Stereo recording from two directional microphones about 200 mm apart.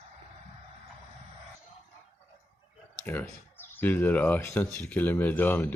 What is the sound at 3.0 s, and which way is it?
Speech, 10° left (ahead or behind).